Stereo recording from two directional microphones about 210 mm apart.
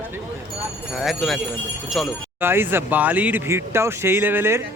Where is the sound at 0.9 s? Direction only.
Centre (ahead or behind).